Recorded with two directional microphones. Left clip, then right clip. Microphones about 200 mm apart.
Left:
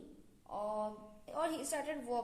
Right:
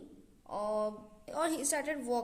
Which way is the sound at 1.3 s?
40° right (ahead or behind).